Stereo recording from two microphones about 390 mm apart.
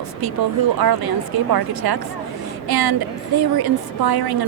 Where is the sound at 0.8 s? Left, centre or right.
Right.